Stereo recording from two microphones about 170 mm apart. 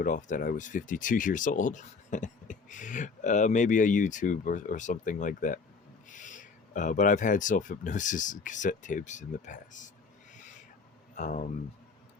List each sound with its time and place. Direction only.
0.0 s speech: 50° left (ahead or behind)
11.1 s speech: 45° left (ahead or behind)